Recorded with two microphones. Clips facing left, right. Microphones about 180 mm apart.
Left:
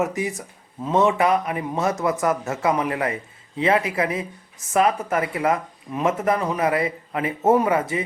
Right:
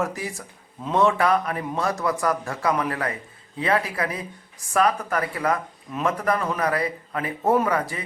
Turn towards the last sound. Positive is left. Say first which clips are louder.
# left 3 dB
turn(degrees=25)  # may be behind; listen again after turning